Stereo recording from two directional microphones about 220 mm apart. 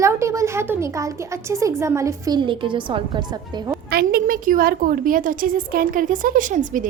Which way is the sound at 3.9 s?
45° right (ahead or behind).